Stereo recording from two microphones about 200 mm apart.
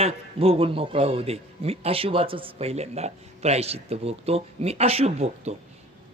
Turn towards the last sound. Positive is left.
turn(degrees=-30)  # may be behind; listen again after turning